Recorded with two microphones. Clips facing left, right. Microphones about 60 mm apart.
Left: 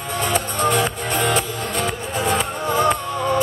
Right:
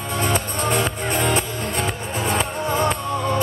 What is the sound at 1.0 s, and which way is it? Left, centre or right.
Music, right.